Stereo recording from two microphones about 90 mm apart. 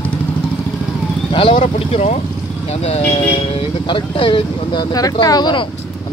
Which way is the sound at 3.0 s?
85° left.